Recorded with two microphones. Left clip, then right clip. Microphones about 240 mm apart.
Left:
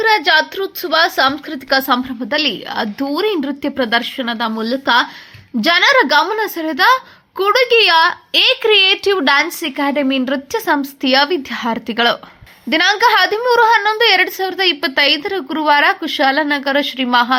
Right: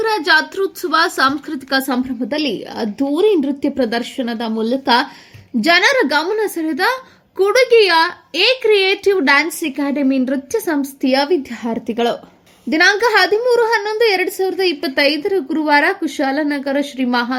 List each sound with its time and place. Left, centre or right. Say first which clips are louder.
0.0 s a woman's voice: left 2 dB; centre